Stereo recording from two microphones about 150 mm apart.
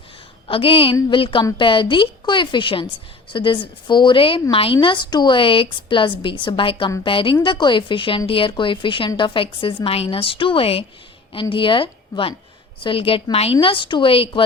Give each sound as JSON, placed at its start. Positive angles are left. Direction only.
{"t": 0.4, "sound": "a woman's voice", "side_deg": 35}